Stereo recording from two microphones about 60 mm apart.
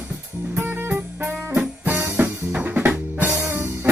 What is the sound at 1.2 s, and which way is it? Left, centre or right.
Music, right.